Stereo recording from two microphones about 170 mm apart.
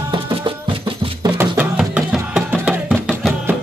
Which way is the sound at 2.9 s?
Centre (ahead or behind).